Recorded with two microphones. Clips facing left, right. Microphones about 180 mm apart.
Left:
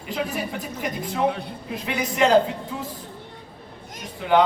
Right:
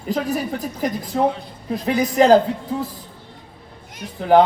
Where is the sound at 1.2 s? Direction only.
65° left (ahead or behind).